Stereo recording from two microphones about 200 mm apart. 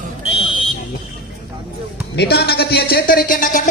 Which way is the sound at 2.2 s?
55° left (ahead or behind).